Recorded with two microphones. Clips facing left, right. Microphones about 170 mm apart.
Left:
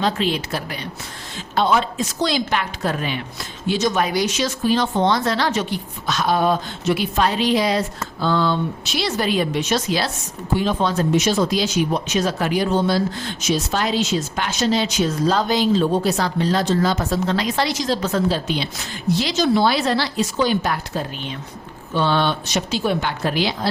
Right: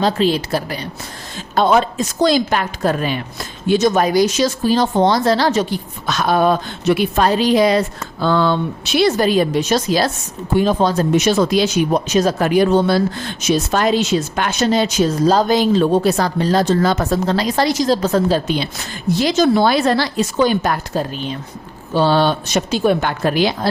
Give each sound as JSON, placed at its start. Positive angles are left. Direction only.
{"t": 0.0, "sound": "a woman's voice", "side_deg": -35}
{"t": 1.5, "sound": "a woman's voice", "side_deg": -45}
{"t": 6.1, "sound": "a woman's voice", "side_deg": -55}
{"t": 7.3, "sound": "a woman's voice", "side_deg": -40}
{"t": 11.1, "sound": "a woman's voice", "side_deg": -65}
{"t": 11.9, "sound": "a woman's voice", "side_deg": -40}
{"t": 17.2, "sound": "a woman's voice", "side_deg": -35}